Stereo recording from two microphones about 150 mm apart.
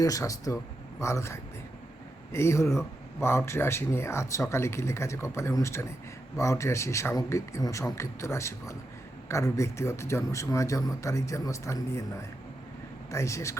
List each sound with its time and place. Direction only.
0.0 s speech: 20° left (ahead or behind)